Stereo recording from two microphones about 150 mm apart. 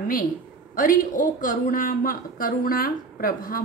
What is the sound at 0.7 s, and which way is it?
Speech, 65° left (ahead or behind).